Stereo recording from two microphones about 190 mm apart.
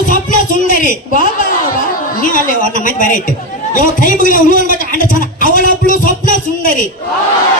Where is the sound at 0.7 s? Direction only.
45° left (ahead or behind).